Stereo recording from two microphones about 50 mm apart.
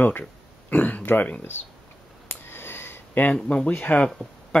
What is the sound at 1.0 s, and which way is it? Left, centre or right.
Speech, left.